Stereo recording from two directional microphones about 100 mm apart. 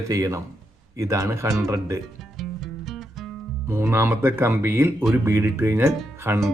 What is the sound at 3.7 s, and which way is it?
Speech, 25° right (ahead or behind).